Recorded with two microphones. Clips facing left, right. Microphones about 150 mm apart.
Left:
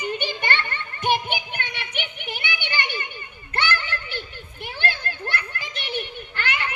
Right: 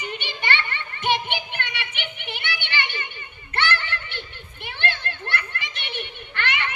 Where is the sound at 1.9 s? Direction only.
40° left (ahead or behind).